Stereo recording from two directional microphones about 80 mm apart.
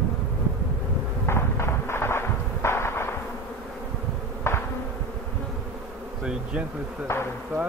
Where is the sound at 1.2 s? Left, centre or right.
Left.